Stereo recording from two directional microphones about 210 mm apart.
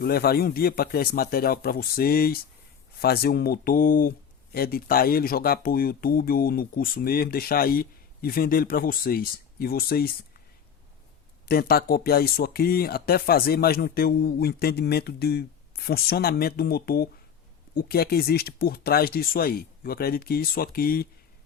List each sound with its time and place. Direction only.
0.0 s speech: 45° left (ahead or behind)
11.4 s speech: 45° left (ahead or behind)